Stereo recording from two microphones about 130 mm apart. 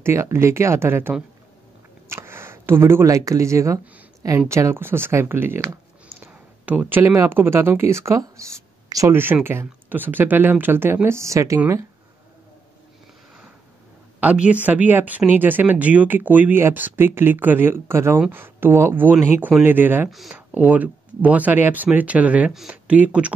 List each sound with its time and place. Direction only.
0.0 s speech: 20° right (ahead or behind)
14.2 s speech: 10° right (ahead or behind)
20.1 s speech: centre (ahead or behind)
20.3 s speech: 15° right (ahead or behind)